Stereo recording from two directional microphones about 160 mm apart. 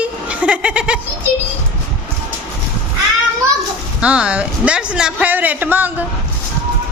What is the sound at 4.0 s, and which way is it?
Speech, 5° right (ahead or behind).